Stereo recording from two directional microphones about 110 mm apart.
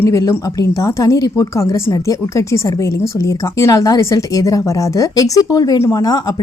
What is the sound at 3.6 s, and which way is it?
Speech, 30° left (ahead or behind).